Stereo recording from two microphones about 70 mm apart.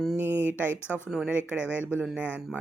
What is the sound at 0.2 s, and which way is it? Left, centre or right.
A woman's voice, right.